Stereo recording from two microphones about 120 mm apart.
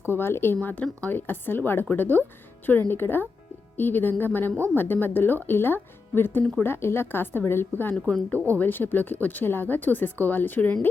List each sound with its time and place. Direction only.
0.1 s speech: 20° left (ahead or behind)